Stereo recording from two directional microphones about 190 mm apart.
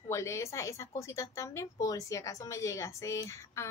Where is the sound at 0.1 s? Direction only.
15° left (ahead or behind).